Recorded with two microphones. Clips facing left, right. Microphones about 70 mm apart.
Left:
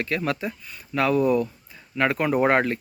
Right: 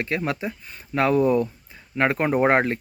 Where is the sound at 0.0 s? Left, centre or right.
Right.